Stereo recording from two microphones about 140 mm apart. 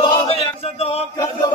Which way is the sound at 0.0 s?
45° left (ahead or behind).